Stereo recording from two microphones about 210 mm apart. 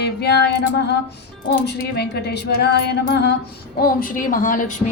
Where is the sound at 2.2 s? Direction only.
50° left (ahead or behind).